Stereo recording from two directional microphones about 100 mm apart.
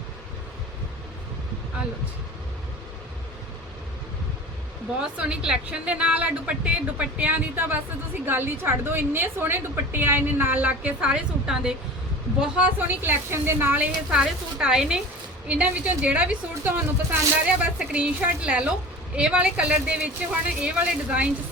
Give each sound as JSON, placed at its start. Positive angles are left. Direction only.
{"t": 4.9, "sound": "a woman's voice", "side_deg": -10}